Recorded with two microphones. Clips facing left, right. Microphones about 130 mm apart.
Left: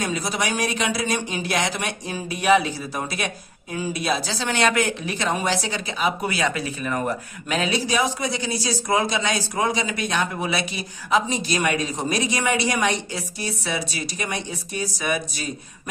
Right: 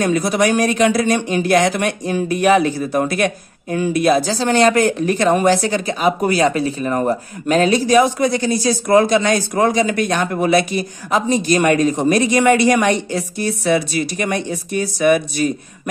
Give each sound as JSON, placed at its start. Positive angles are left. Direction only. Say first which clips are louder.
{"t": 0.0, "sound": "speech", "louder": "right 9 dB", "side_deg": -55}